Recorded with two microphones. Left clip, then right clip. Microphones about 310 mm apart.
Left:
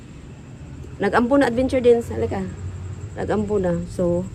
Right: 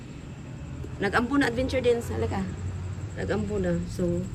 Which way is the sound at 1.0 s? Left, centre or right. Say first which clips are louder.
Left 7 dB; centre.